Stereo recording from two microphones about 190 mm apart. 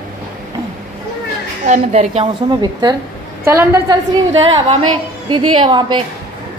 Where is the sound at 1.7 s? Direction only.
35° right (ahead or behind).